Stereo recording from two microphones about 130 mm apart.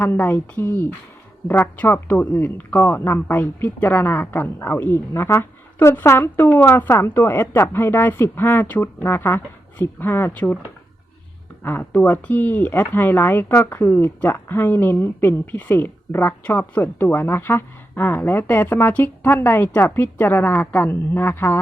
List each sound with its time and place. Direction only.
0.0 s speech: 15° left (ahead or behind)
11.6 s speech: 15° left (ahead or behind)